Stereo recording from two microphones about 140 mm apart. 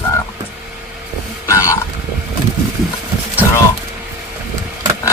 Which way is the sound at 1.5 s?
20° left (ahead or behind).